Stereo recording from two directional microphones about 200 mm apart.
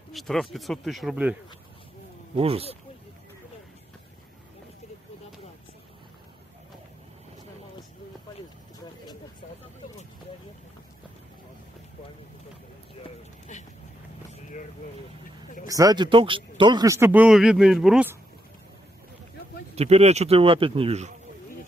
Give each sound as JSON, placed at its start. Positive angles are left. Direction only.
{"t": 0.1, "sound": "speech", "side_deg": 0}
{"t": 2.3, "sound": "speech", "side_deg": -30}
{"t": 13.0, "sound": "a sound", "side_deg": 35}
{"t": 15.6, "sound": "speech", "side_deg": -15}
{"t": 19.7, "sound": "speech", "side_deg": -30}